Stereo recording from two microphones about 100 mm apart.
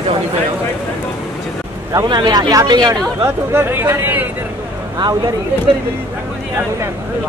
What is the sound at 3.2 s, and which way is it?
Speech, 20° right (ahead or behind).